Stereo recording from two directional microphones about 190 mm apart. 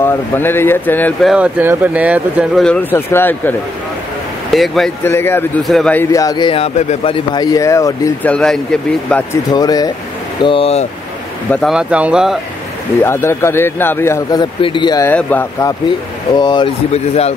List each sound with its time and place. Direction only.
0.0 s speech: 10° left (ahead or behind)
1.3 s speech: 10° right (ahead or behind)
2.6 s speech: 10° left (ahead or behind)
5.0 s speech: 10° left (ahead or behind)
6.1 s speech: 20° left (ahead or behind)
8.3 s speech: 5° left (ahead or behind)
9.1 s speech: 15° left (ahead or behind)
11.5 s speech: centre (ahead or behind)
13.0 s speech: 15° left (ahead or behind)
15.0 s speech: 10° left (ahead or behind)
16.3 s speech: 20° left (ahead or behind)
16.9 s speech: 35° left (ahead or behind)